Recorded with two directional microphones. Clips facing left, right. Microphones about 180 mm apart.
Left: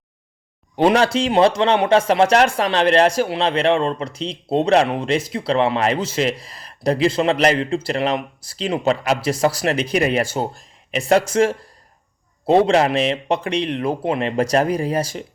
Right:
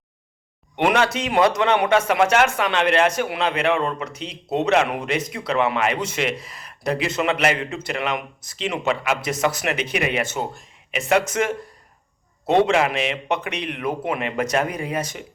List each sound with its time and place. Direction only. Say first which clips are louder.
0.8 s speech: left 4 dB; 30° left (ahead or behind)